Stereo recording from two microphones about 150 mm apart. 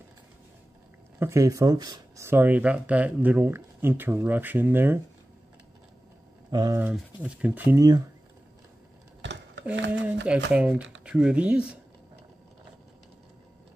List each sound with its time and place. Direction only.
1.2 s speech: 20° right (ahead or behind)
6.5 s speech: 25° right (ahead or behind)
6.8 s speech: 10° right (ahead or behind)
9.7 s speech: 10° right (ahead or behind)